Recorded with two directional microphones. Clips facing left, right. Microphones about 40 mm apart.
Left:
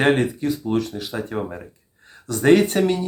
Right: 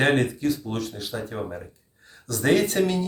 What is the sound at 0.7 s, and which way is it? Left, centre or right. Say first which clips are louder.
Speech: left 6 dB; left.